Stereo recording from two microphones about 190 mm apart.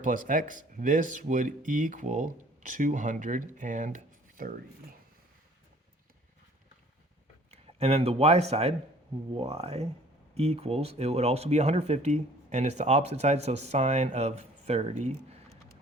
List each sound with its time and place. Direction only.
0.0 s speech: 45° right (ahead or behind)
7.5 s speech: 35° right (ahead or behind)